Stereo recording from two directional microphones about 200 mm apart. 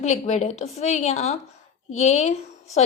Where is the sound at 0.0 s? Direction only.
35° left (ahead or behind).